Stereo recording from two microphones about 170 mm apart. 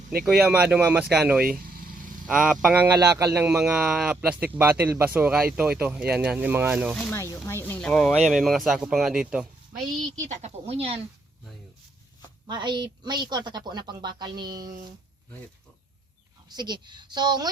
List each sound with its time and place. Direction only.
0.3 s speech: 5° right (ahead or behind)
1.5 s vehicle: 60° right (ahead or behind)
2.2 s speech: 5° right (ahead or behind)
6.9 s speech: 10° left (ahead or behind)
10.2 s speech: 40° right (ahead or behind)
12.5 s a woman's voice: 25° right (ahead or behind)
16.5 s a woman's voice: 25° right (ahead or behind)